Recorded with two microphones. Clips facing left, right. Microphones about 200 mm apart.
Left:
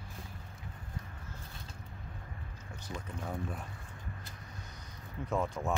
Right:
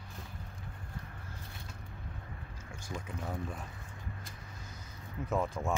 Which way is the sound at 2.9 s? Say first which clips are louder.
Right 1 dB; 10° right (ahead or behind).